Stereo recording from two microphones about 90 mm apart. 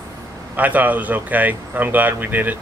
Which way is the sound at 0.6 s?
20° right (ahead or behind).